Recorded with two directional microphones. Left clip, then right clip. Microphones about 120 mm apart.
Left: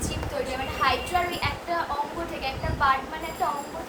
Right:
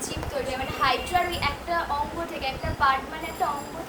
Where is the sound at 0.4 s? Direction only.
5° left (ahead or behind).